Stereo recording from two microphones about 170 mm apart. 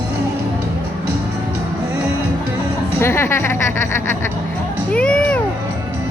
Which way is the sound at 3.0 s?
15° left (ahead or behind).